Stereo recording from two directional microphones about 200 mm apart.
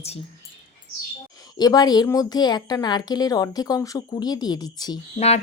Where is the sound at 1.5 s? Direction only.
20° left (ahead or behind).